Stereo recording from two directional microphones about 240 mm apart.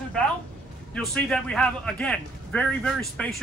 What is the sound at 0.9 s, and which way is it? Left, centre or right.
A man's voice, centre.